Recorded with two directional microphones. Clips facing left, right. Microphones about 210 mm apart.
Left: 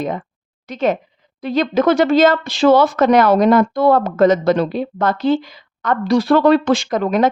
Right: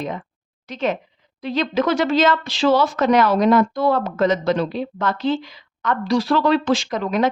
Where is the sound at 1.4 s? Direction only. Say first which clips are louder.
Left 4 dB; 50° left (ahead or behind).